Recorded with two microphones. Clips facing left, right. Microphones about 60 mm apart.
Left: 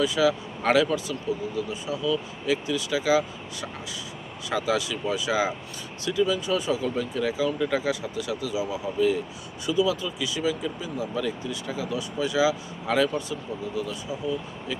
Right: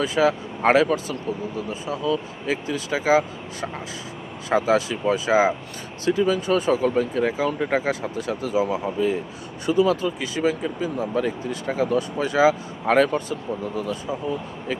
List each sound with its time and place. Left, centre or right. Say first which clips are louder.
0.0 s speech: right 2 dB; right